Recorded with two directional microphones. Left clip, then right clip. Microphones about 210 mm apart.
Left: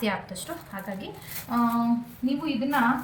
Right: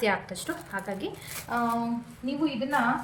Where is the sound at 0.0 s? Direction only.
40° right (ahead or behind).